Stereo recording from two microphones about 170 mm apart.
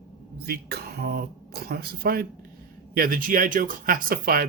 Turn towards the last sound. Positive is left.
turn(degrees=-60)  # may be behind; listen again after turning